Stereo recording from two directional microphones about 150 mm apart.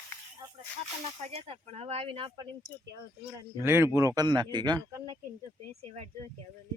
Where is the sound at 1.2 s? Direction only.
45° right (ahead or behind).